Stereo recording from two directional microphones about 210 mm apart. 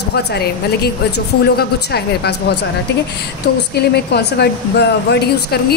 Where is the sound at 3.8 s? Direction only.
50° left (ahead or behind).